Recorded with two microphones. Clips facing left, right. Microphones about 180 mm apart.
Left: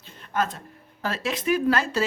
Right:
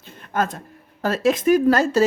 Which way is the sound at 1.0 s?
45° right (ahead or behind).